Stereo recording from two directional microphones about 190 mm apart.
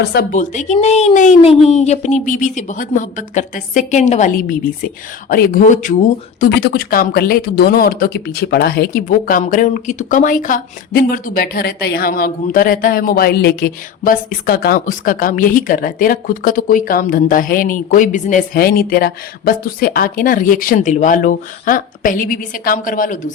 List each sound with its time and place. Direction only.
0.0 s speech: 55° left (ahead or behind)
0.3 s a woman's voice: 40° left (ahead or behind)
6.6 s speech: 55° left (ahead or behind)